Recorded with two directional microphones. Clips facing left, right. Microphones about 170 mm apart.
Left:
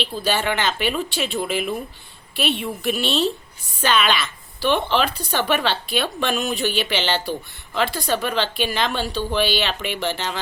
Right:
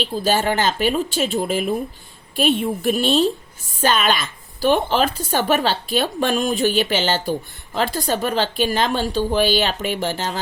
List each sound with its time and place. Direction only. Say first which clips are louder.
0.0 s speech: right 3 dB; 45° right (ahead or behind)